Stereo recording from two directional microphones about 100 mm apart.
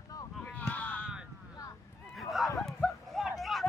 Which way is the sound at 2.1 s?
Centre (ahead or behind).